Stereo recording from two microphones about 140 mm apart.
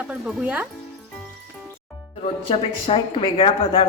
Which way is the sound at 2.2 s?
40° left (ahead or behind).